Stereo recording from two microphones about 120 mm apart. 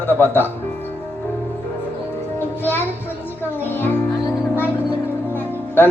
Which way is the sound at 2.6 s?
15° left (ahead or behind).